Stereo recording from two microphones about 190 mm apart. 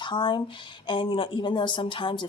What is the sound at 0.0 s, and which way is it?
Speech, 25° left (ahead or behind).